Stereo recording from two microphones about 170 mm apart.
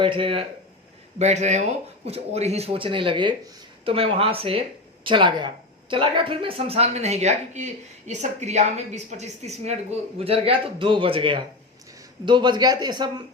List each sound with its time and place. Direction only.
0.0 s speech: 30° right (ahead or behind)
1.2 s a man's voice: 40° right (ahead or behind); by 13.2 s 25° right (ahead or behind)